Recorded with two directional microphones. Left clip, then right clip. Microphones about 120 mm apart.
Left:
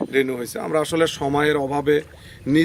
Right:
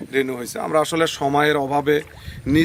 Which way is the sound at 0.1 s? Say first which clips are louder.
Right 2 dB; 15° right (ahead or behind).